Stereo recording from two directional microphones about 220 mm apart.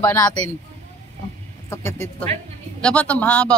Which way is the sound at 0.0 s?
15° left (ahead or behind).